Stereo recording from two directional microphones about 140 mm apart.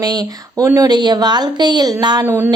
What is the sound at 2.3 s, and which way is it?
Speech, 15° right (ahead or behind).